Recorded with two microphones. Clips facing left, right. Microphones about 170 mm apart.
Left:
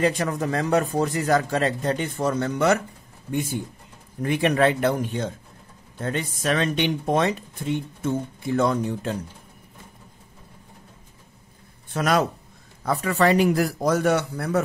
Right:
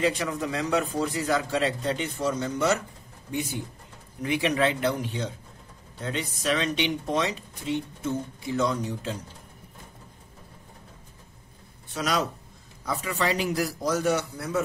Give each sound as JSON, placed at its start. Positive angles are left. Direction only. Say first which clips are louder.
{"t": 0.0, "sound": "speech", "louder": "left 3 dB", "side_deg": 45}
{"t": 11.9, "sound": "a man's voice", "louder": "left 6 dB", "side_deg": 55}